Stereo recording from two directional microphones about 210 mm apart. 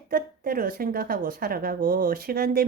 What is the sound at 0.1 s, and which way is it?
A woman's voice, 45° right (ahead or behind).